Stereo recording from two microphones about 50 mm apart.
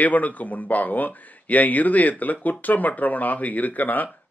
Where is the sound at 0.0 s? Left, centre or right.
Left.